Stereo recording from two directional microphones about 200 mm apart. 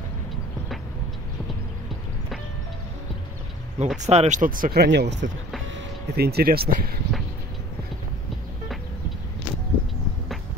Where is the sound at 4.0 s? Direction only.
35° right (ahead or behind).